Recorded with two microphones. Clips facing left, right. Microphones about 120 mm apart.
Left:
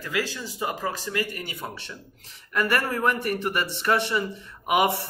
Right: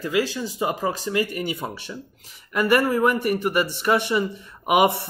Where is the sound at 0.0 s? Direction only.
20° right (ahead or behind).